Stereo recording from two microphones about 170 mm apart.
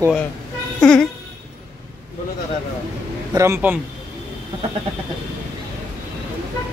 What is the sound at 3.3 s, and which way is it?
Speech, 15° right (ahead or behind).